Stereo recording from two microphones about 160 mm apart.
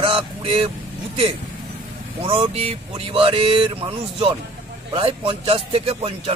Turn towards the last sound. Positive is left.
turn(degrees=-40)  # may be behind; listen again after turning